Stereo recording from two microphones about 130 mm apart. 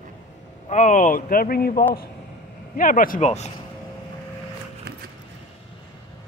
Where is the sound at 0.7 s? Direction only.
70° left (ahead or behind).